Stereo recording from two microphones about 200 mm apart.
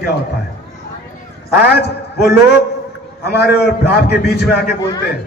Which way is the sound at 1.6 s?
55° left (ahead or behind).